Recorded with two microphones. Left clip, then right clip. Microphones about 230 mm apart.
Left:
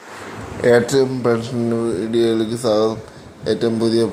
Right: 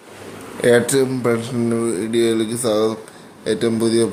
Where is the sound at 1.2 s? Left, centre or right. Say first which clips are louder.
Left 1 dB; centre.